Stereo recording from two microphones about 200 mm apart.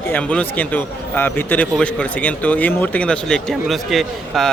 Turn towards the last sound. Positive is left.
turn(degrees=0)  # may be behind; listen again after turning